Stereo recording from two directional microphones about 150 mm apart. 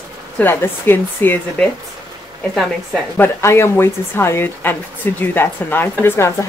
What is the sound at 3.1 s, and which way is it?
Speech, 15° left (ahead or behind).